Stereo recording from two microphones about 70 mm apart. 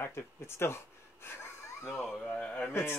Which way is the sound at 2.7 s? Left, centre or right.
Left.